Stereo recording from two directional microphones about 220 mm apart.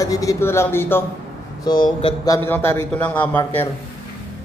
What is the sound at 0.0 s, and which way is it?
A man's voice, 15° left (ahead or behind).